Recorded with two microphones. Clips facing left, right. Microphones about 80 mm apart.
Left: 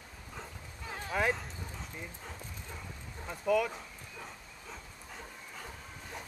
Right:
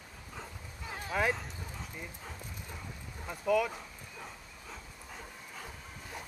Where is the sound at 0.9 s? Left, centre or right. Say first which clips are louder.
Even; centre.